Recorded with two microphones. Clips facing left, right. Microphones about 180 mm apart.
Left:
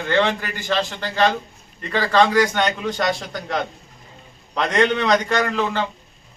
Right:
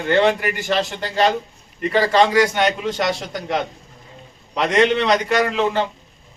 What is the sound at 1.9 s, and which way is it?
A man's voice, 10° right (ahead or behind).